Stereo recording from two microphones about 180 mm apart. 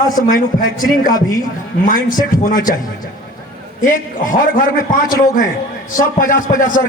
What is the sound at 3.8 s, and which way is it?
A man's voice, 45° left (ahead or behind).